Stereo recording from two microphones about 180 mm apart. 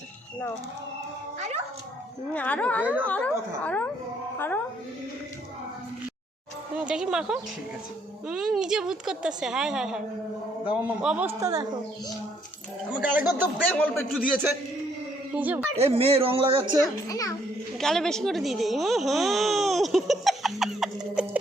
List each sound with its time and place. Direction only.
2.3 s speech: 5° left (ahead or behind)
2.8 s a man's voice: 10° right (ahead or behind)
3.1 s speech: 10° left (ahead or behind)
6.7 s a woman's voice: 5° right (ahead or behind)
12.9 s a man's voice: 10° right (ahead or behind)
13.7 s speech: 5° left (ahead or behind)
14.2 s a man's voice: 10° right (ahead or behind)
15.7 s speech: 35° right (ahead or behind)
17.1 s a child's voice: 20° left (ahead or behind)
17.7 s speech: centre (ahead or behind)